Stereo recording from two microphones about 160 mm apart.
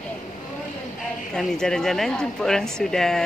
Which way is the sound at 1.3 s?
5° left (ahead or behind).